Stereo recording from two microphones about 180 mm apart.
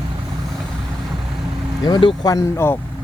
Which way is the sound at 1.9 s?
25° left (ahead or behind).